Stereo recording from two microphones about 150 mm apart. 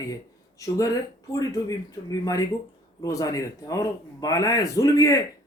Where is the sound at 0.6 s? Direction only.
20° left (ahead or behind).